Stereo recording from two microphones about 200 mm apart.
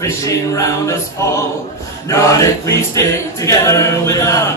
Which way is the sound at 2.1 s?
15° left (ahead or behind).